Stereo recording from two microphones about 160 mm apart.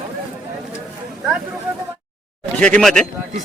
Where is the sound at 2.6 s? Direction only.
5° left (ahead or behind).